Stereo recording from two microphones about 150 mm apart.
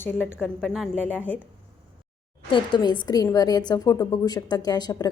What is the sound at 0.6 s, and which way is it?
Speech, centre (ahead or behind).